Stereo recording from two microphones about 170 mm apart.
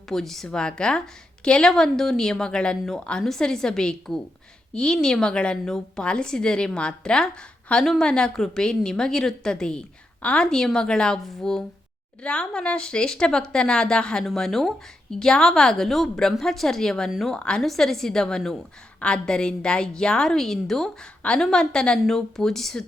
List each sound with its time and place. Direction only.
0.1 s a woman's voice: centre (ahead or behind)